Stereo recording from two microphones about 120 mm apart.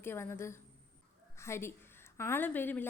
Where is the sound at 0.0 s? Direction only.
20° left (ahead or behind).